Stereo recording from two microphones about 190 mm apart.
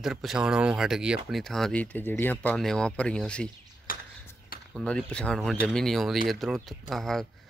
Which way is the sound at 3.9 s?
50° left (ahead or behind).